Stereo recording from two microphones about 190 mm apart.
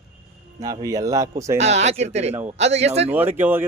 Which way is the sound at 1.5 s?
35° right (ahead or behind).